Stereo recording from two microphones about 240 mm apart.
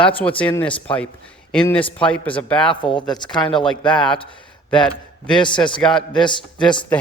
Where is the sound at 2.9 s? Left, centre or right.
Centre.